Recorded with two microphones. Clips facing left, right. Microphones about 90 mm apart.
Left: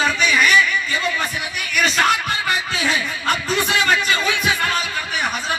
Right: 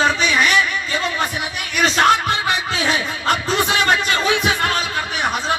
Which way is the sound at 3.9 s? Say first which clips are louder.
Right 2 dB; 45° right (ahead or behind).